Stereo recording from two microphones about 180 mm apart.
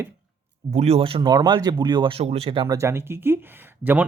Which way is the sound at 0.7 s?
35° right (ahead or behind).